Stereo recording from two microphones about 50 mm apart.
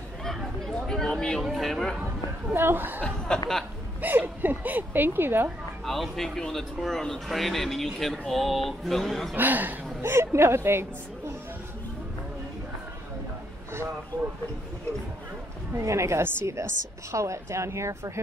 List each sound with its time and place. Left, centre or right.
0.2 s a sound: centre
1.4 s speech: centre
2.5 s speech: right
3.1 s speech: centre
4.0 s a woman's voice: right
5.9 s speech: centre
9.3 s a woman's voice: right
10.0 s a woman's voice: right
15.7 s a woman's voice: right